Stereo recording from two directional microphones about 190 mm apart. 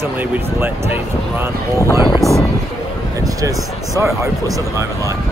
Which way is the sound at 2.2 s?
15° right (ahead or behind).